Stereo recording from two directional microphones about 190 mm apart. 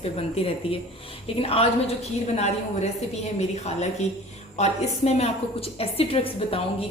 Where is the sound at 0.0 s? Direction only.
30° left (ahead or behind).